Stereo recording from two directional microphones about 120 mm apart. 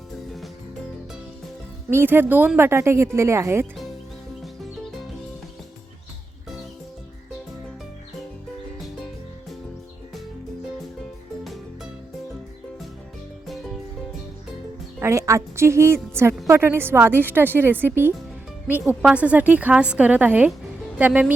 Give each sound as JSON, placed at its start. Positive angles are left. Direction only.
{"t": 1.9, "sound": "speech", "side_deg": -20}
{"t": 11.4, "sound": "music", "side_deg": 0}
{"t": 14.9, "sound": "music", "side_deg": -25}
{"t": 16.5, "sound": "a woman's voice", "side_deg": -20}